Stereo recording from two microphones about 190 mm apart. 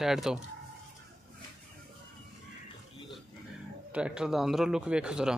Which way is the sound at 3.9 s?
5° right (ahead or behind).